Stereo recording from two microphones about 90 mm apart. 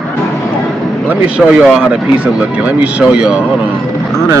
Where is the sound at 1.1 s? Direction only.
15° right (ahead or behind).